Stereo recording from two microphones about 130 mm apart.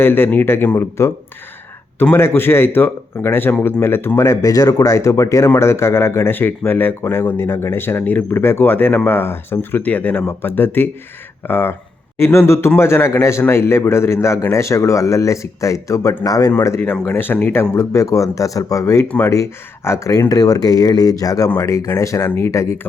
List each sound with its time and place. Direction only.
0.0 s a man's voice: 15° left (ahead or behind)
19.0 s speech: 10° left (ahead or behind)
19.3 s a man's voice: 20° left (ahead or behind)